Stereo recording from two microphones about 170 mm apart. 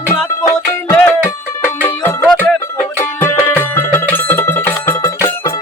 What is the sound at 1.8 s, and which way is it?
Music, 10° left (ahead or behind).